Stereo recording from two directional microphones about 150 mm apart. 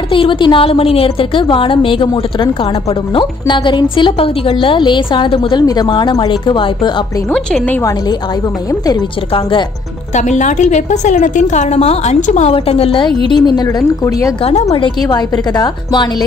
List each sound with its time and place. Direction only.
0.1 s a woman's voice: 35° left (ahead or behind)
7.3 s speech: 10° left (ahead or behind)
9.3 s a woman's voice: 35° left (ahead or behind)
10.1 s a woman's voice: 50° left (ahead or behind); by 14.3 s 25° left (ahead or behind)
14.4 s a woman's voice: 40° left (ahead or behind)
15.0 s a woman's voice: 30° left (ahead or behind)